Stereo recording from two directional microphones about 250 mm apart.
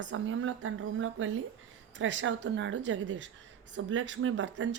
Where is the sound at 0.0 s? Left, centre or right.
Right.